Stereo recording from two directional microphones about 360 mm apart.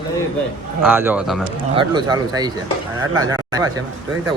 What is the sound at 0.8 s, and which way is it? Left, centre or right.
Speech, centre.